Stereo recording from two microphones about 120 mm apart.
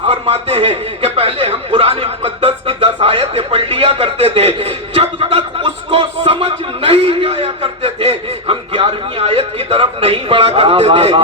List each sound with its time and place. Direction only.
0.1 s a man's voice: 55° right (ahead or behind)